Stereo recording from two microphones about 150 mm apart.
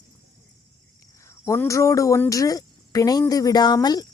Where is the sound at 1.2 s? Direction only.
20° left (ahead or behind).